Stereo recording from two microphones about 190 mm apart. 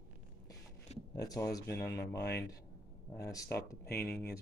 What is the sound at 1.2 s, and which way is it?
Speech, 15° left (ahead or behind).